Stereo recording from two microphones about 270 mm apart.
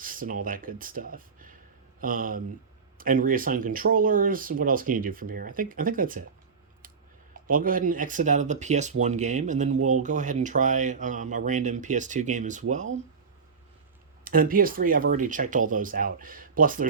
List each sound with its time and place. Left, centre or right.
0.0 s speech: right
7.5 s speech: right
14.3 s speech: right